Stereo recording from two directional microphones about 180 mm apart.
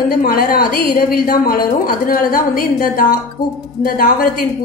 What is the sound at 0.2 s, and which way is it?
A woman's voice, 55° left (ahead or behind).